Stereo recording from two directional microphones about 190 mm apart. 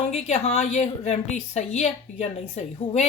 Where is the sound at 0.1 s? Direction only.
35° left (ahead or behind).